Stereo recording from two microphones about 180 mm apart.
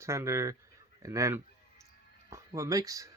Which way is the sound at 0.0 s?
15° right (ahead or behind).